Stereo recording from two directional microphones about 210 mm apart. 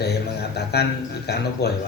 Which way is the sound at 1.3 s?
50° left (ahead or behind).